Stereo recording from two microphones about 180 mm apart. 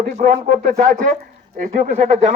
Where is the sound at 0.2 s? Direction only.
45° right (ahead or behind).